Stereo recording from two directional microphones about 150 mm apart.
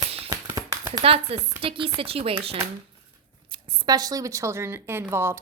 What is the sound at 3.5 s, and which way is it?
Speech, 25° right (ahead or behind).